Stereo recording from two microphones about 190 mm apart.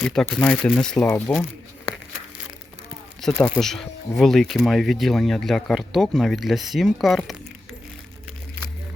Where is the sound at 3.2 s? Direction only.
5° left (ahead or behind).